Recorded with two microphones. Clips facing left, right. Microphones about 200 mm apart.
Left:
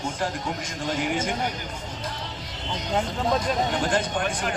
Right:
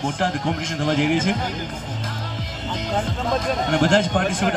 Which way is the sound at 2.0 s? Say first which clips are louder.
Right 2 dB; 45° right (ahead or behind).